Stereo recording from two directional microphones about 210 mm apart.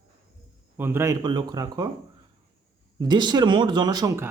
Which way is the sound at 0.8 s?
10° right (ahead or behind).